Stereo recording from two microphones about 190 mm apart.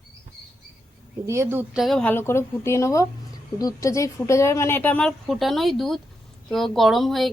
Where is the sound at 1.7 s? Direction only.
Centre (ahead or behind).